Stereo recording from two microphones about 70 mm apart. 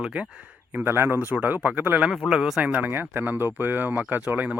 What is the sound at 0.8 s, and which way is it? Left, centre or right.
Speech, right.